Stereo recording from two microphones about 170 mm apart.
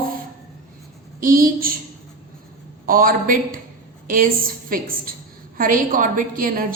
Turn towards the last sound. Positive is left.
turn(degrees=-55)  # may be behind; listen again after turning